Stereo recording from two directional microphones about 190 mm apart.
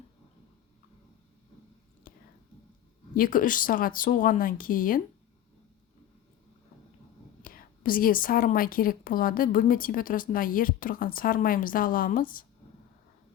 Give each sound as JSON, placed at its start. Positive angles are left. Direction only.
{"t": 2.1, "sound": "whispering", "side_deg": 50}
{"t": 3.2, "sound": "speech", "side_deg": 45}
{"t": 7.4, "sound": "speech", "side_deg": 50}